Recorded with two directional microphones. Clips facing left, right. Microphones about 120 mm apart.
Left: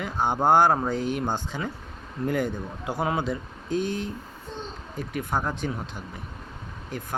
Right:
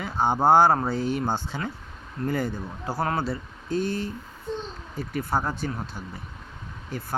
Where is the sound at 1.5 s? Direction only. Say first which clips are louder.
Even; 15° left (ahead or behind).